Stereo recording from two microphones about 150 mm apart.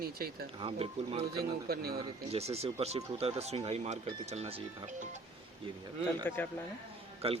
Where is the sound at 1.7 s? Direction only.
90° right.